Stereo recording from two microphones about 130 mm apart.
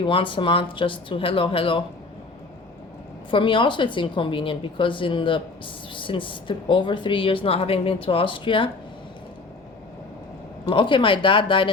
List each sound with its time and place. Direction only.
0.0 s a woman's voice: 40° left (ahead or behind)
3.2 s a woman's voice: 40° left (ahead or behind)
10.7 s a woman's voice: 40° left (ahead or behind)